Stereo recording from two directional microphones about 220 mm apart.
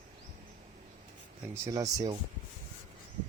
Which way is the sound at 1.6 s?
15° right (ahead or behind).